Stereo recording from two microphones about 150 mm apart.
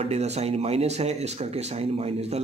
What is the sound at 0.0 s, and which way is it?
A man's voice, 45° right (ahead or behind).